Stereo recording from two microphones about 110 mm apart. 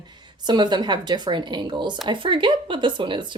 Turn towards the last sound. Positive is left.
turn(degrees=-45)  # may be behind; listen again after turning